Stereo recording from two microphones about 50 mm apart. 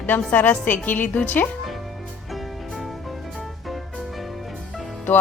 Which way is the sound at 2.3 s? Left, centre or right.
Centre.